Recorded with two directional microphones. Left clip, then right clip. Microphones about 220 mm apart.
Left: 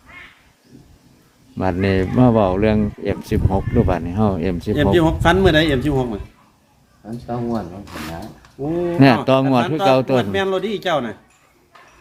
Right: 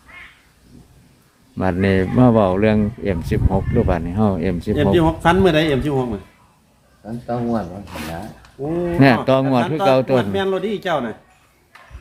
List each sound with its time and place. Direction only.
1.5 s speech: centre (ahead or behind)
4.9 s speech: 30° left (ahead or behind)
7.3 s speech: 10° right (ahead or behind)
9.0 s speech: 5° left (ahead or behind)
10.3 s a man's voice: 30° left (ahead or behind)